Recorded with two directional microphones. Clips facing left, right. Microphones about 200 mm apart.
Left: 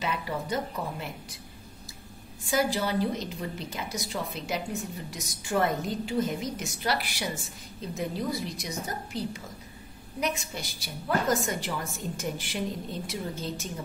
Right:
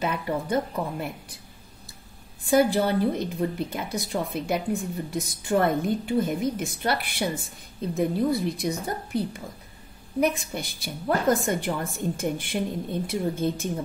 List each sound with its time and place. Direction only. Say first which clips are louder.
0.0 s a woman's voice: right 4 dB; 50° right (ahead or behind)
2.4 s a woman's voice: right 7 dB; 55° right (ahead or behind)